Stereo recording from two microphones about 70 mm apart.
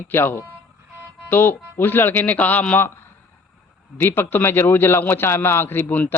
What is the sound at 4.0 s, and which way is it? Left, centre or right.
Speech, left.